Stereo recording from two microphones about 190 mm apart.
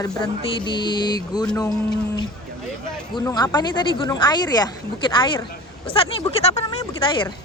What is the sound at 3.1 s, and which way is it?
Speech, 20° left (ahead or behind).